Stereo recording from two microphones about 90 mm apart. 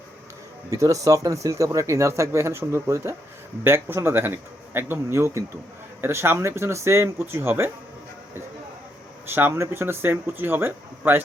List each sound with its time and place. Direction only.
0.7 s speech: 35° right (ahead or behind)
9.2 s speech: 25° right (ahead or behind)